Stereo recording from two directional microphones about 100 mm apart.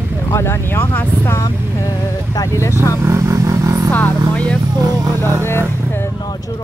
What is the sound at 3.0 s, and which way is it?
Vehicle, 30° right (ahead or behind).